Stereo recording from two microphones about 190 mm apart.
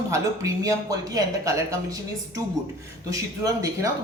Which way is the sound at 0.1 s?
20° right (ahead or behind).